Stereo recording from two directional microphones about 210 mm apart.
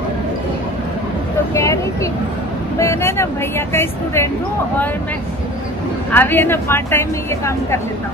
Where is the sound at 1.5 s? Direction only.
15° left (ahead or behind).